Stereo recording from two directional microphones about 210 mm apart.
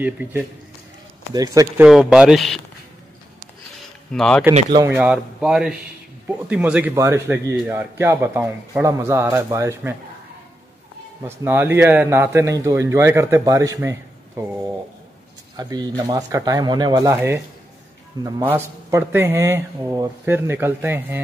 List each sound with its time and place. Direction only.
0.0 s a man's voice: 5° right (ahead or behind)
1.9 s speech: centre (ahead or behind)
4.1 s speech: 5° left (ahead or behind)
4.7 s a man's voice: 5° right (ahead or behind)
11.2 s a man's voice: 10° right (ahead or behind)
15.5 s a man's voice: 20° right (ahead or behind)